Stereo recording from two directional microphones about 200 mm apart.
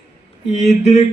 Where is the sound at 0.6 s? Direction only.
35° left (ahead or behind).